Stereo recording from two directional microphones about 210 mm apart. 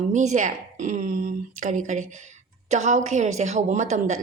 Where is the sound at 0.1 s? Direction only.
35° right (ahead or behind).